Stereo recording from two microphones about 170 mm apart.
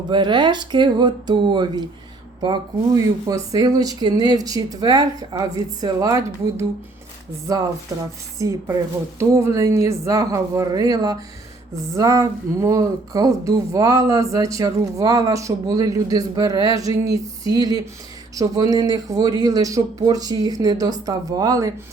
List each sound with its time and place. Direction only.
0.1 s speech: 25° right (ahead or behind)